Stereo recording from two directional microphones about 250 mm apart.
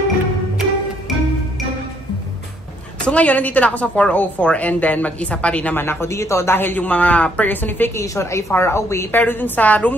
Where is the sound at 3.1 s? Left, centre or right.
Centre.